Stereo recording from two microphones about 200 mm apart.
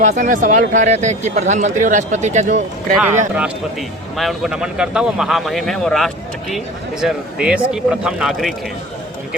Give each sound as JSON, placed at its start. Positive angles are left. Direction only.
{"t": 0.0, "sound": "speech", "side_deg": -40}
{"t": 3.3, "sound": "a man's voice", "side_deg": -5}